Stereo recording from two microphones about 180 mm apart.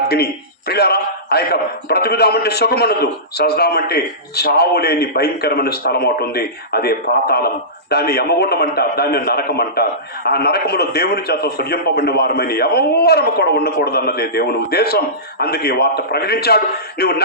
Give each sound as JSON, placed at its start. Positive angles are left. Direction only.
{"t": 0.7, "sound": "a man's voice", "side_deg": 65}